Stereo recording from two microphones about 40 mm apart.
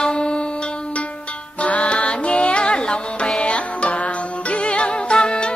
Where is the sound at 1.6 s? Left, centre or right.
Left.